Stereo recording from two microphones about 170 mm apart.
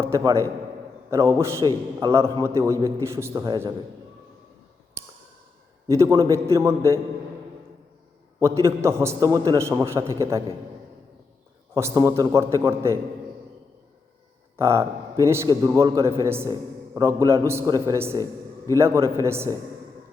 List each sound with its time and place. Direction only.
0.0 s a man's voice: 20° right (ahead or behind)
5.9 s a man's voice: 20° right (ahead or behind)
8.4 s a man's voice: 15° right (ahead or behind)
11.7 s a man's voice: 20° right (ahead or behind)
14.5 s a man's voice: 15° right (ahead or behind)